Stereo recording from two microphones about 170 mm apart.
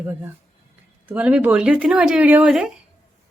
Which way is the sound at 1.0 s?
10° right (ahead or behind).